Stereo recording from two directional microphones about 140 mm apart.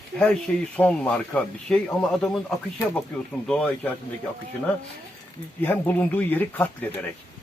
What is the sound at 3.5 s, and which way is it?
Speech, 5° left (ahead or behind).